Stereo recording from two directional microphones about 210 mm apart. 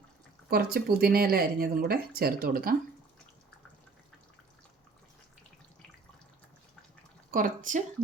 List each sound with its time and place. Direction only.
0.5 s speech: 50° right (ahead or behind)
7.3 s speech: 40° right (ahead or behind)